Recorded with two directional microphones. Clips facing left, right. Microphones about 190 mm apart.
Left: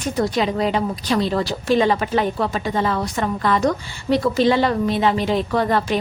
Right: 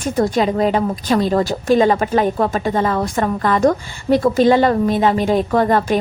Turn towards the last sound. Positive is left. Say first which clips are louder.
# right 4 dB
turn(degrees=-45)  # may be behind; listen again after turning